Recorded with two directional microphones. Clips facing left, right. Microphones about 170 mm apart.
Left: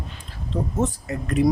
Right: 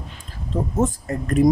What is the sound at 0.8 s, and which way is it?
Speech, 45° right (ahead or behind).